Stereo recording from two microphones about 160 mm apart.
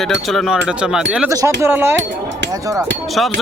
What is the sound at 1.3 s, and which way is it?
Speech, 20° right (ahead or behind).